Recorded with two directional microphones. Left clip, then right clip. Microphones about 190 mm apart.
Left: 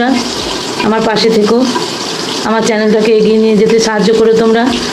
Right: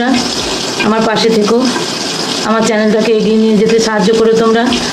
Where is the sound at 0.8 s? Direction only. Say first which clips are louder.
Left 1 dB; 15° left (ahead or behind).